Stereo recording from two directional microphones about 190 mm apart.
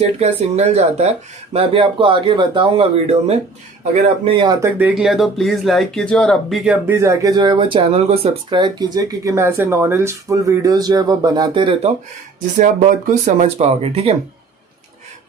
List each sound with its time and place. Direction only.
0.2 s speech: 35° right (ahead or behind)
4.6 s speech: 10° right (ahead or behind); by 11.9 s 25° right (ahead or behind)
12.5 s speech: 45° right (ahead or behind)